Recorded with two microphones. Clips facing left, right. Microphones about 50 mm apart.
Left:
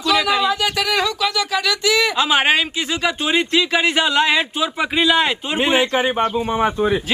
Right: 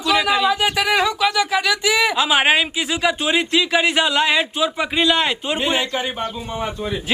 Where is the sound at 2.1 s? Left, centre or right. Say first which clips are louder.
Even; centre.